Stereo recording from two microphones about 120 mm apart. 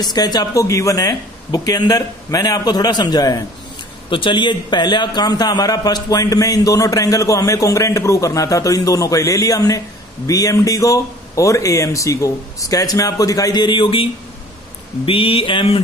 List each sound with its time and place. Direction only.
0.0 s speech: 35° left (ahead or behind)
4.1 s a man's voice: 40° left (ahead or behind)
15.0 s a sound: 50° left (ahead or behind)